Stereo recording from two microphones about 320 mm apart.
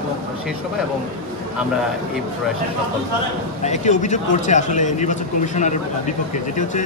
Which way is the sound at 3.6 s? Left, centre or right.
Left.